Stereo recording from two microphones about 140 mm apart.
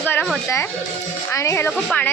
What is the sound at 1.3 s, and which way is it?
Speech, 20° left (ahead or behind).